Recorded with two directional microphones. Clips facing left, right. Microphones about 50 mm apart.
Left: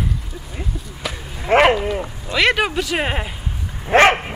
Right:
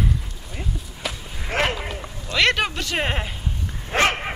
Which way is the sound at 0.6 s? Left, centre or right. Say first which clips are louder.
Left 1 dB; centre.